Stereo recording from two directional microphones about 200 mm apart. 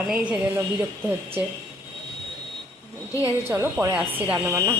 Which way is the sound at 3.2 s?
10° right (ahead or behind).